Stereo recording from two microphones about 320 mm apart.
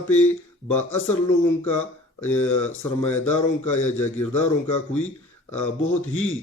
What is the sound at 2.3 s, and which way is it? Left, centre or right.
Speech, left.